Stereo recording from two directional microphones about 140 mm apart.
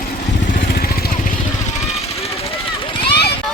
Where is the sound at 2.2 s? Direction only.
40° left (ahead or behind).